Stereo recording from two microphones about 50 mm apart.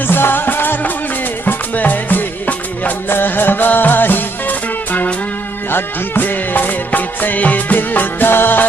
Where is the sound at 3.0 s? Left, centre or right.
Left.